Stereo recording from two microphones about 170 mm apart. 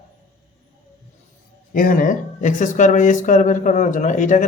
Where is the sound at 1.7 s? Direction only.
55° left (ahead or behind).